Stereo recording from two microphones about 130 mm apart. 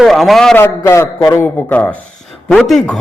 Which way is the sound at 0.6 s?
20° left (ahead or behind).